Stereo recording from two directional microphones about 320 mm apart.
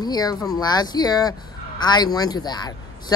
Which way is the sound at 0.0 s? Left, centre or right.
Centre.